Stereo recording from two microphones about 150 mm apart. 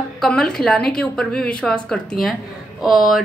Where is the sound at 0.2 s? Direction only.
5° left (ahead or behind).